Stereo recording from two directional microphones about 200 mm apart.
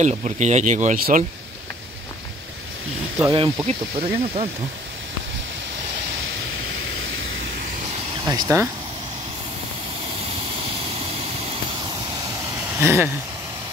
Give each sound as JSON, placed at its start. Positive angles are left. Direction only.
{"t": 0.0, "sound": "speech", "side_deg": -35}
{"t": 3.2, "sound": "speech", "side_deg": -20}
{"t": 6.7, "sound": "vehicle", "side_deg": -90}
{"t": 8.3, "sound": "speech", "side_deg": -15}
{"t": 12.7, "sound": "speech", "side_deg": -10}